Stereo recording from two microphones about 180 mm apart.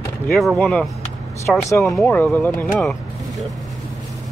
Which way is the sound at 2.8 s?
Centre (ahead or behind).